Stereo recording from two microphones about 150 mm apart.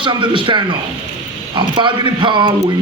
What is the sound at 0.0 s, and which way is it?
A man's voice, 35° right (ahead or behind).